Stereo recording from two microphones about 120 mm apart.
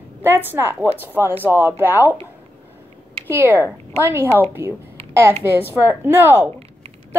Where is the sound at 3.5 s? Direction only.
20° left (ahead or behind).